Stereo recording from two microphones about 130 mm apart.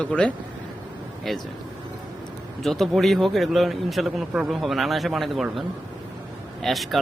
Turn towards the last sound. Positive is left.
turn(degrees=0)  # may be behind; listen again after turning